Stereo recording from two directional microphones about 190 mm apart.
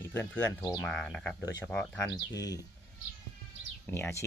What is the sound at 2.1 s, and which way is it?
Speech, 20° left (ahead or behind).